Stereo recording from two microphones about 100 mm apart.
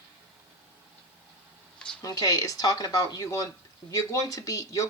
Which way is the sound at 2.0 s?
35° left (ahead or behind).